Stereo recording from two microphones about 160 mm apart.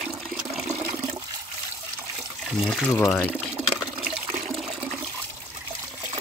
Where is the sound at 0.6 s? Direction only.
20° right (ahead or behind).